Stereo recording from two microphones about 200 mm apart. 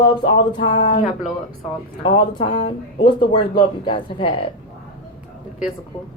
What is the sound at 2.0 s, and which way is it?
A woman's voice, 25° left (ahead or behind).